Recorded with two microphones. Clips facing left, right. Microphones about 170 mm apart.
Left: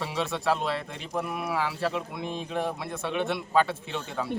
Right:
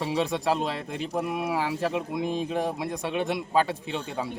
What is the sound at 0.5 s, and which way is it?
Speech, 40° right (ahead or behind).